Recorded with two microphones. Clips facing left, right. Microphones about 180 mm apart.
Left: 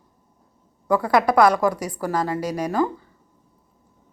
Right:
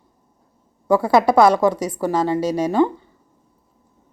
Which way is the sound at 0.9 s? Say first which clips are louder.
Right 4 dB; 25° right (ahead or behind).